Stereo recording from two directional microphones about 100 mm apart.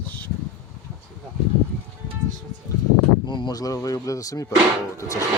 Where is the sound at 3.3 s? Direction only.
50° left (ahead or behind).